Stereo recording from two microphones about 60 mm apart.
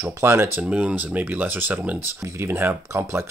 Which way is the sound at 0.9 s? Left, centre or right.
Right.